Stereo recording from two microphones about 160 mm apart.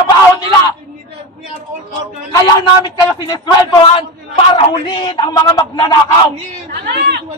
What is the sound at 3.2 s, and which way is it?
Speech, 25° left (ahead or behind).